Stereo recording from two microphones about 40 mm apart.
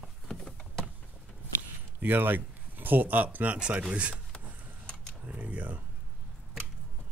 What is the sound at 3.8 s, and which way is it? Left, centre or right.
Speech, right.